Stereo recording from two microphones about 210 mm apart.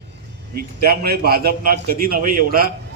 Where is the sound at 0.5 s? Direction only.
45° right (ahead or behind).